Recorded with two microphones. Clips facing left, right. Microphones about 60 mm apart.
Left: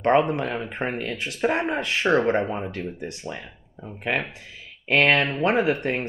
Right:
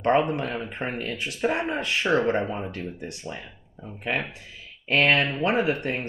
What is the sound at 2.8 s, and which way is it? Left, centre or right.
Speech, left.